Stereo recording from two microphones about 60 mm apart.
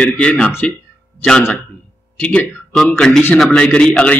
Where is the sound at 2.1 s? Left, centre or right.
Left.